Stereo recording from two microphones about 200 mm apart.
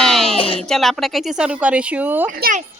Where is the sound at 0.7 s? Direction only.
Centre (ahead or behind).